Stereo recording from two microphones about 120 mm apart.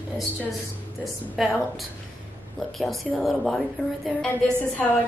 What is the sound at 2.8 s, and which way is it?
A woman's voice, centre (ahead or behind).